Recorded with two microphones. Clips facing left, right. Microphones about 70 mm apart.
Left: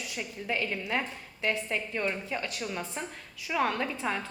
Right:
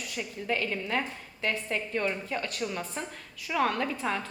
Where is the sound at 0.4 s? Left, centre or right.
Centre.